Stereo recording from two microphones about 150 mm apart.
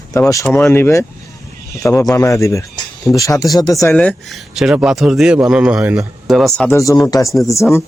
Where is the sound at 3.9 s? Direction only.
5° left (ahead or behind).